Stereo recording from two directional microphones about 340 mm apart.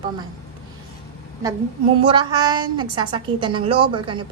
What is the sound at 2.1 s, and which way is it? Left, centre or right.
A woman's voice, centre.